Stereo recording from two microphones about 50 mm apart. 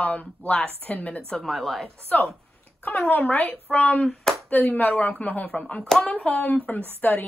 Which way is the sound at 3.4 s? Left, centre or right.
Left.